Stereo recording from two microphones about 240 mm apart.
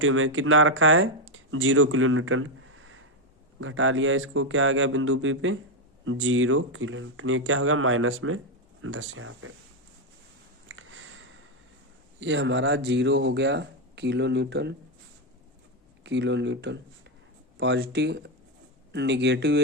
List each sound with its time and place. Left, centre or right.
0.0 s speech: right
10.7 s a sound: right
12.2 s speech: right
16.0 s speech: right